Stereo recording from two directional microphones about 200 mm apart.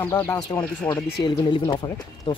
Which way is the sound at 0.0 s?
15° left (ahead or behind).